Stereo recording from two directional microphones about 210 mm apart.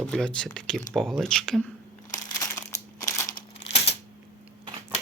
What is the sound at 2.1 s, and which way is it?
Crumpling, 15° left (ahead or behind).